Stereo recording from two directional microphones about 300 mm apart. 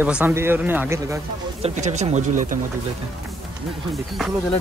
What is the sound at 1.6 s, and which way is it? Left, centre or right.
Speech, right.